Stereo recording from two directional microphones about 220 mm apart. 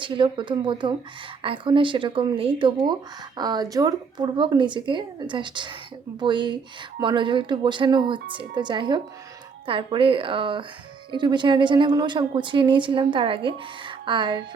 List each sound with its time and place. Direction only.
0.0 s speech: 20° right (ahead or behind)